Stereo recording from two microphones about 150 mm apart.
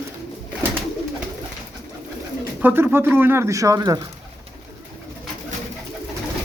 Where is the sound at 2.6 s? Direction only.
15° right (ahead or behind).